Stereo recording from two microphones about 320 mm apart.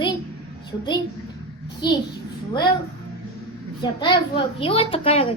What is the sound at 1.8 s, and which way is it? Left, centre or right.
Speech, centre.